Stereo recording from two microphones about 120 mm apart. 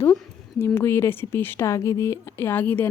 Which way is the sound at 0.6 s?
20° left (ahead or behind).